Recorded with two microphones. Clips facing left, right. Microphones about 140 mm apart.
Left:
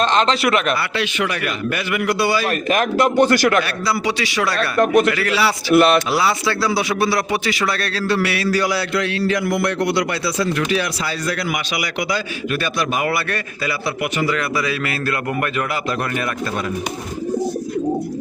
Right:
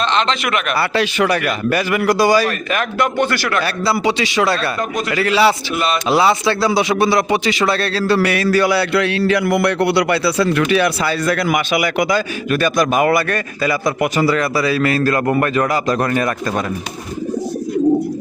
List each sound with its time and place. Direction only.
0.0 s speech: 40° left (ahead or behind)
0.8 s a man's voice: 40° right (ahead or behind)
2.5 s speech: 40° left (ahead or behind)
3.6 s a man's voice: 25° right (ahead or behind)
4.8 s a man's voice: 70° left (ahead or behind)
5.1 s a man's voice: 25° right (ahead or behind)
5.7 s speech: 65° left (ahead or behind)
6.1 s a man's voice: 25° right (ahead or behind); by 16.3 s 40° right (ahead or behind)